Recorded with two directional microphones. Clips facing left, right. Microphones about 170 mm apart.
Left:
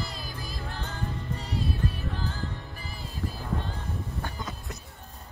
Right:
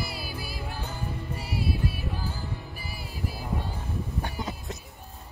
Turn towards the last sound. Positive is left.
turn(degrees=-20)  # may be behind; listen again after turning